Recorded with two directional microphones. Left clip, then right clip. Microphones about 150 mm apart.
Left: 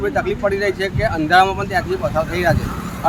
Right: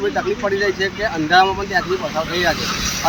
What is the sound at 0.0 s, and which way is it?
Speech, 15° left (ahead or behind).